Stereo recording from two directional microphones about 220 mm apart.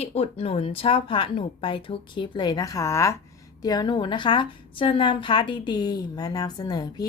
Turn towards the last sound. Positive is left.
turn(degrees=15)  # may be behind; listen again after turning